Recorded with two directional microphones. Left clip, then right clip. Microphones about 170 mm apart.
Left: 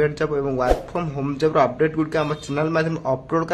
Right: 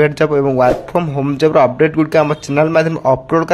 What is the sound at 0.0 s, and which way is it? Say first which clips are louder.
Speech: right 9 dB; 40° right (ahead or behind).